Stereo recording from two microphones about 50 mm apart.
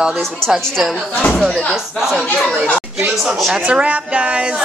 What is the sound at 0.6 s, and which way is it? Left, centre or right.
Speech, centre.